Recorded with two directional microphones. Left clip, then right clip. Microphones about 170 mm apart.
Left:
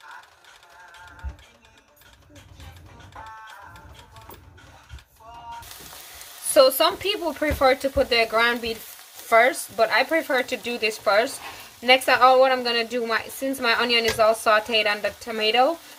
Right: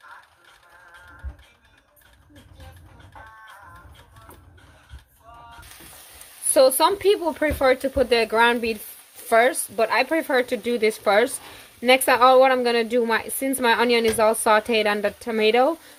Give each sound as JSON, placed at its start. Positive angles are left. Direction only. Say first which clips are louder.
{"t": 6.5, "sound": "a woman's voice", "louder": "even", "side_deg": -45}